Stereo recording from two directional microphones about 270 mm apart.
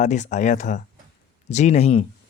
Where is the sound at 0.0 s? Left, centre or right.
Left.